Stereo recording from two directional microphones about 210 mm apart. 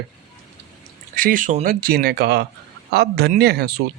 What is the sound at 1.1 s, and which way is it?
Speech, 40° right (ahead or behind).